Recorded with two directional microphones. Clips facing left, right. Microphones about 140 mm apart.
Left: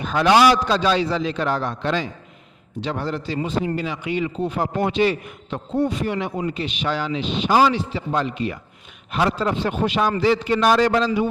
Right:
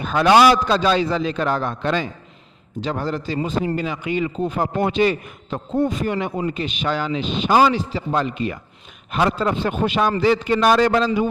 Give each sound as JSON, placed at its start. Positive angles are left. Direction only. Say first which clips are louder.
{"t": 0.0, "sound": "a man's voice", "louder": "right 2 dB", "side_deg": -50}